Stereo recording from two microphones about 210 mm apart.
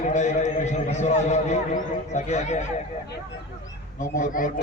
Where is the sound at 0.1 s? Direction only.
35° left (ahead or behind).